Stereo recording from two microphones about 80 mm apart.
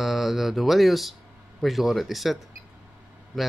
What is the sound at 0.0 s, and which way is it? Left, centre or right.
Speech, centre.